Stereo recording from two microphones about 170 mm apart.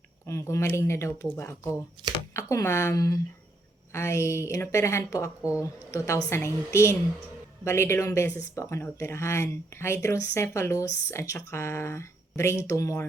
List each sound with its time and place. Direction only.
0.3 s speech: 15° left (ahead or behind)